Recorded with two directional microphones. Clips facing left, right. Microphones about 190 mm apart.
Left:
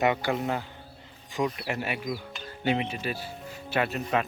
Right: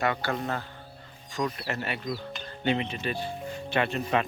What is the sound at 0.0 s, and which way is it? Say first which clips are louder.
Speech: left 3 dB; 15° left (ahead or behind).